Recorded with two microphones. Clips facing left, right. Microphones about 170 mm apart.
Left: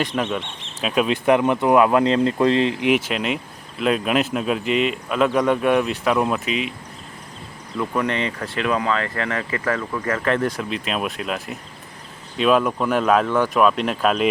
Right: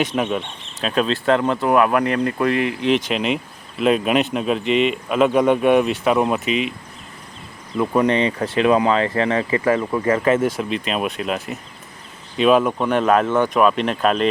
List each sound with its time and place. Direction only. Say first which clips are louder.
0.0 s speech: right 2 dB; 5° right (ahead or behind)
0.8 s speech: even; 10° left (ahead or behind)
2.9 s speech: right 2 dB; 5° left (ahead or behind)
7.8 s speech: right 5 dB; 20° right (ahead or behind); by 14.3 s centre (ahead or behind)